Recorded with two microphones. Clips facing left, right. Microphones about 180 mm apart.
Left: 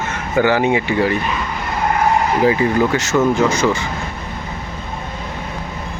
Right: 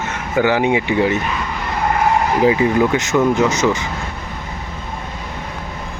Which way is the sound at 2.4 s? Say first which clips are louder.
Right 2 dB; 15° right (ahead or behind).